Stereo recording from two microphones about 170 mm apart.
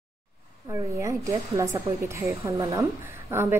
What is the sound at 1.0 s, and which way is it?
A woman's voice, 20° right (ahead or behind).